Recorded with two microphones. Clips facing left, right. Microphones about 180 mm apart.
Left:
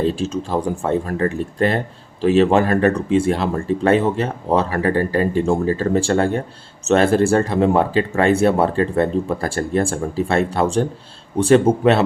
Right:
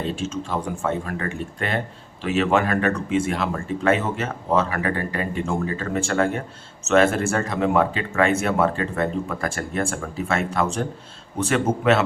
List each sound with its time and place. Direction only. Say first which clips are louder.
0.0 s speech: left 6 dB; 35° left (ahead or behind)